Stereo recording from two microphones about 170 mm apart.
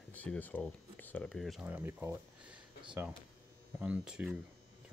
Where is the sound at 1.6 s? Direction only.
10° right (ahead or behind).